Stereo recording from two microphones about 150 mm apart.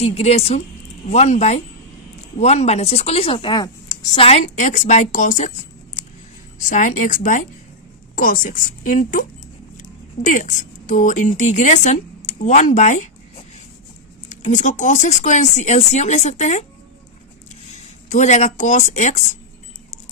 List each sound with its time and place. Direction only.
0.0 s a woman's voice: 45° left (ahead or behind); by 4.3 s 30° left (ahead or behind)
4.3 s a woman's voice: 50° left (ahead or behind)
8.1 s a woman's voice: 70° left (ahead or behind)
10.2 s a woman's voice: 55° left (ahead or behind)
17.7 s speech: 50° left (ahead or behind)